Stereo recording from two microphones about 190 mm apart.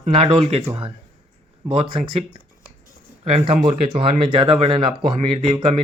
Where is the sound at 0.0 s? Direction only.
35° right (ahead or behind).